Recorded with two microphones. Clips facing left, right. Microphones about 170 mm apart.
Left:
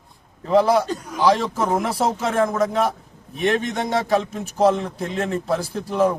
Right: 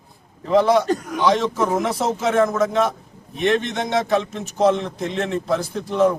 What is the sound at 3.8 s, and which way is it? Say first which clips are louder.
Speech: right 1 dB; 35° left (ahead or behind).